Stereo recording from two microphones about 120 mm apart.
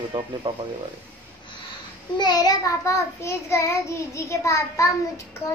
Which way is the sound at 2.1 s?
35° left (ahead or behind).